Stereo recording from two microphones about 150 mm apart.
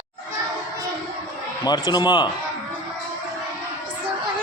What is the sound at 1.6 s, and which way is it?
Speech, 25° left (ahead or behind).